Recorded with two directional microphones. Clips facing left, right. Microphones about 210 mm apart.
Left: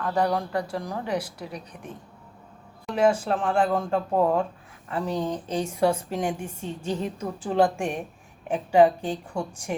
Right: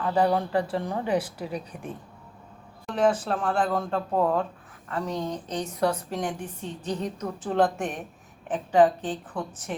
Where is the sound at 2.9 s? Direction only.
10° left (ahead or behind).